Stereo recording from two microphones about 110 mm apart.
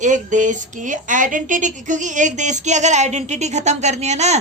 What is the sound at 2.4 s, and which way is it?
A woman's voice, 90° right.